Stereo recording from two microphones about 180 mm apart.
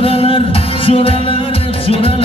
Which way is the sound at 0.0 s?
30° left (ahead or behind).